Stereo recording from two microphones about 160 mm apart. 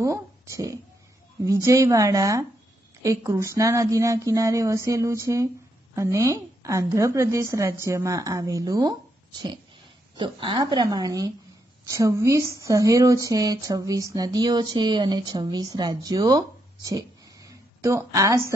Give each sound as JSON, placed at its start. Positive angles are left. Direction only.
{"t": 0.0, "sound": "a woman's voice", "side_deg": -20}
{"t": 10.1, "sound": "a woman's voice", "side_deg": -30}
{"t": 17.5, "sound": "a sound", "side_deg": -20}